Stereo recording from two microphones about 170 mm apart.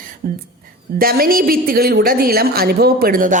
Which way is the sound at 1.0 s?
60° right (ahead or behind).